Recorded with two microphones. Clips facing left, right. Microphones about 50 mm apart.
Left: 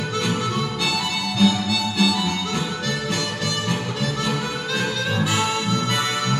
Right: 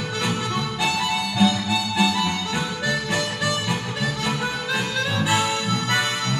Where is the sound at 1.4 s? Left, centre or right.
Centre.